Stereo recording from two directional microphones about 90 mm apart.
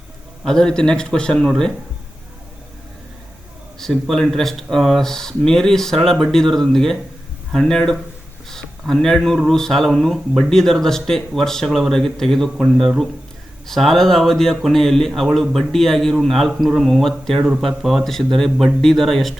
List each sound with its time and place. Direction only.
0.4 s a man's voice: 5° left (ahead or behind)
3.8 s speech: 5° left (ahead or behind)